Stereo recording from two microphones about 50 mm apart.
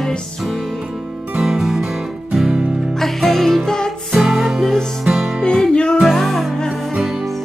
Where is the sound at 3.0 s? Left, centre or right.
Centre.